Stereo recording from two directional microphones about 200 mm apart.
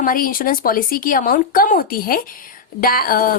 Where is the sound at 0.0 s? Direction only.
45° left (ahead or behind).